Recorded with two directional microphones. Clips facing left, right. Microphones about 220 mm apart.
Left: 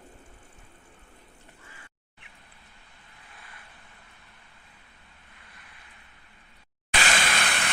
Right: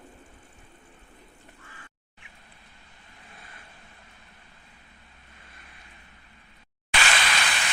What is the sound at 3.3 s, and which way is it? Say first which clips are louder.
Vehicle: even; 25° right (ahead or behind).